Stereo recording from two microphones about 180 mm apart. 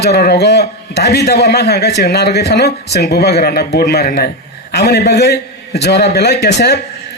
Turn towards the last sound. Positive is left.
turn(degrees=65)  # may be behind; listen again after turning